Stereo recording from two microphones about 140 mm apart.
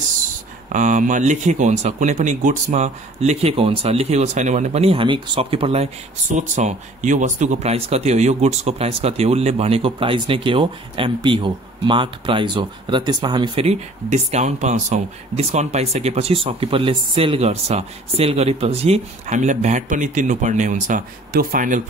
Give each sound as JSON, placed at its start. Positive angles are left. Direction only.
{"t": 0.7, "sound": "speech", "side_deg": -65}
{"t": 13.7, "sound": "speech", "side_deg": -50}